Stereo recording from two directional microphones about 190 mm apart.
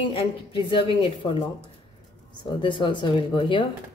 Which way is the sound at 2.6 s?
25° left (ahead or behind).